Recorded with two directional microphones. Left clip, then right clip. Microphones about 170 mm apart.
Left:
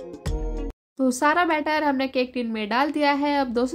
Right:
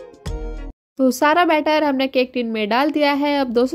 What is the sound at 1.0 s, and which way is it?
Speech, 35° right (ahead or behind).